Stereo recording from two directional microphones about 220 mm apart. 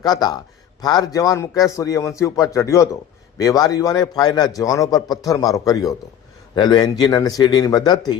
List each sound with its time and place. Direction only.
0.0 s a man's voice: 15° left (ahead or behind)